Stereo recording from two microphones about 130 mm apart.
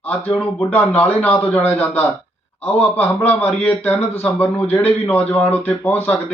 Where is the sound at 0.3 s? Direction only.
15° left (ahead or behind).